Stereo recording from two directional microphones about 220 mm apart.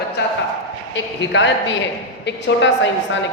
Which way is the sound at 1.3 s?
55° left (ahead or behind).